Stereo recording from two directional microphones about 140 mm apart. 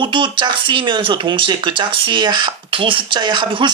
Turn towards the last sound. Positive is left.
turn(degrees=-35)  # may be behind; listen again after turning